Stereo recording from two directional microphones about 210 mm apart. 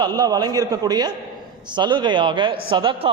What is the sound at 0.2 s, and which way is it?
A man's voice, 20° right (ahead or behind).